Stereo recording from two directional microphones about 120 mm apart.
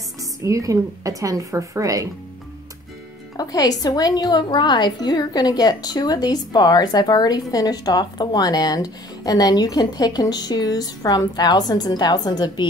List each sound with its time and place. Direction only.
0.2 s a woman's voice: 25° right (ahead or behind)
3.3 s a woman's voice: 30° left (ahead or behind)